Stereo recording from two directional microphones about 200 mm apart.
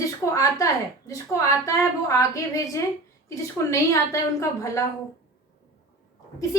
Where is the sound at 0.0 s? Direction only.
15° left (ahead or behind).